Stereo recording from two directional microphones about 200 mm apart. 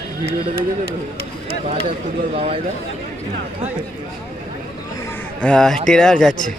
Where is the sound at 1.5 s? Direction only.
30° right (ahead or behind).